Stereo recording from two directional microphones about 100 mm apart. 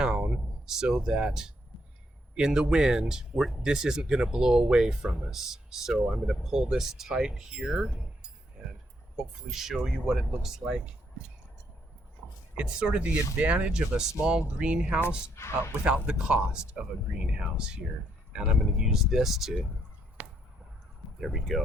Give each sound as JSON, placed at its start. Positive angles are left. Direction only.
{"t": 0.0, "sound": "speech", "side_deg": -10}
{"t": 9.5, "sound": "speech", "side_deg": -5}
{"t": 12.5, "sound": "speech", "side_deg": -10}
{"t": 15.4, "sound": "speech", "side_deg": 25}
{"t": 16.0, "sound": "speech", "side_deg": -10}
{"t": 20.2, "sound": "a sound", "side_deg": -15}
{"t": 21.2, "sound": "speech", "side_deg": 0}